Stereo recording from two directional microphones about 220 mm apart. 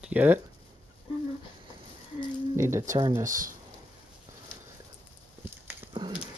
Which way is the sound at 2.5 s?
15° right (ahead or behind).